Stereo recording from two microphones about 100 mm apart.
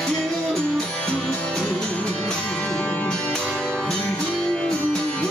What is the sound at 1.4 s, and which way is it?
Music, 10° left (ahead or behind).